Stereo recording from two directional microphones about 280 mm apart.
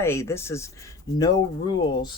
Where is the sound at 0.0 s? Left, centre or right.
Centre.